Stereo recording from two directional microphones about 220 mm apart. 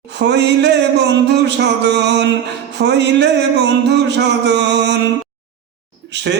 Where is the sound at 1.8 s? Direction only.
50° right (ahead or behind).